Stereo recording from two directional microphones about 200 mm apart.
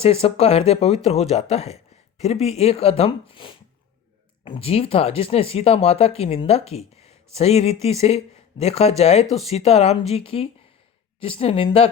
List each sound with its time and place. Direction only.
0.0 s a woman's voice: 30° left (ahead or behind)